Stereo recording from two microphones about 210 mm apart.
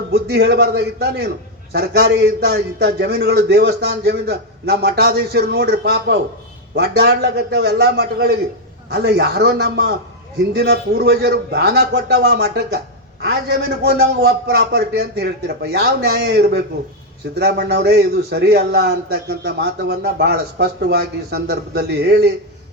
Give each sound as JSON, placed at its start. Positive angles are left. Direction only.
{"t": 0.1, "sound": "a man's voice", "side_deg": -50}